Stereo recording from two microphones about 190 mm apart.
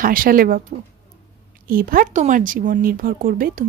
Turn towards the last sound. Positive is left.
turn(degrees=-45)  # may be behind; listen again after turning